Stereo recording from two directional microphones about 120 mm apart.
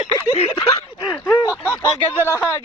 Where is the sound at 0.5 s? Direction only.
30° left (ahead or behind).